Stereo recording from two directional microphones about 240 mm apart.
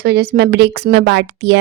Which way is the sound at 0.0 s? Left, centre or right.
Right.